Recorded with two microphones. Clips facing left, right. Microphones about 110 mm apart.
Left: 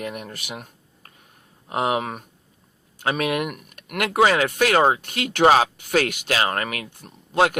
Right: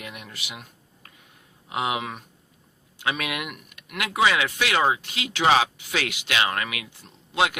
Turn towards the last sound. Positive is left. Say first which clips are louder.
# left 4 dB
turn(degrees=45)  # may be behind; listen again after turning